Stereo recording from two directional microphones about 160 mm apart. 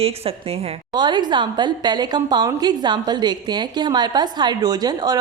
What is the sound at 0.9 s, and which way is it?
A woman's voice, 25° right (ahead or behind).